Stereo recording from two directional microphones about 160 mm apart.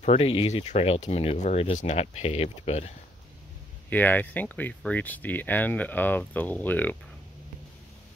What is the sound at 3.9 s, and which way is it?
Speech, 10° left (ahead or behind).